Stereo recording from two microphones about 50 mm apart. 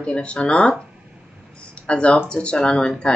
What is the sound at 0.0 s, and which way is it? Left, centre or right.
Speech, left.